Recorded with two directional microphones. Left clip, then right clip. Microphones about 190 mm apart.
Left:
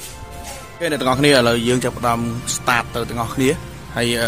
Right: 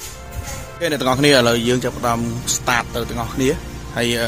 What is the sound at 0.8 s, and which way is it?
Speech, centre (ahead or behind).